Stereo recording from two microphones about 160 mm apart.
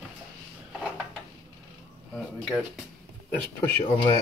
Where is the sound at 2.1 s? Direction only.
Centre (ahead or behind).